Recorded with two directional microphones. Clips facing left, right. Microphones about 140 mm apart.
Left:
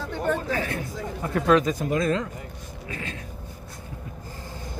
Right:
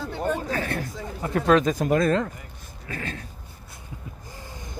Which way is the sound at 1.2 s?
30° right (ahead or behind).